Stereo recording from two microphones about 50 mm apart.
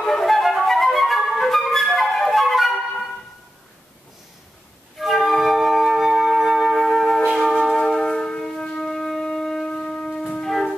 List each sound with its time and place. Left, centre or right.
0.0 s flute: centre
4.9 s flute: centre
7.7 s wind instrument: centre
9.7 s shofar: centre
10.4 s music: centre